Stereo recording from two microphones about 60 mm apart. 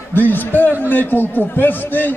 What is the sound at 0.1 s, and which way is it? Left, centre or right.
A man's voice, left.